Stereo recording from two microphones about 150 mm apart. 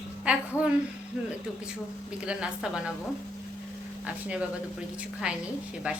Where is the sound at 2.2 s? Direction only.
5° right (ahead or behind).